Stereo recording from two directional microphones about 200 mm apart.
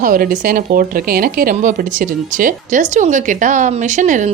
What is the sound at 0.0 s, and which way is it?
A woman's voice, 45° right (ahead or behind).